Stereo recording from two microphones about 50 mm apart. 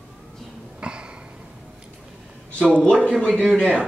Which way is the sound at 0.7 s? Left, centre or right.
Right.